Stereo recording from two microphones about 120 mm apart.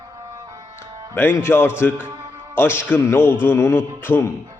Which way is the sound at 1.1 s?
20° left (ahead or behind).